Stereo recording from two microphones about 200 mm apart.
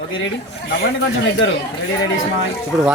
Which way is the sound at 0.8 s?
60° left (ahead or behind).